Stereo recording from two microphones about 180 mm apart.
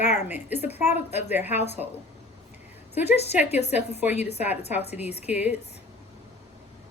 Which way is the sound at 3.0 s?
35° left (ahead or behind).